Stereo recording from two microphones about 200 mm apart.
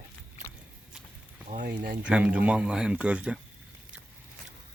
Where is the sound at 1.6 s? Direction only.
50° right (ahead or behind).